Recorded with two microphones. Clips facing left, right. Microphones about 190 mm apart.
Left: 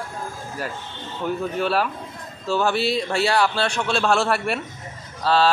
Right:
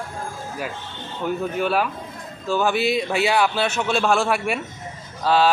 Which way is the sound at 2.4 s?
15° right (ahead or behind).